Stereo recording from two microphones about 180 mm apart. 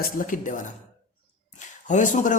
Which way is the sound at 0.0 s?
45° left (ahead or behind).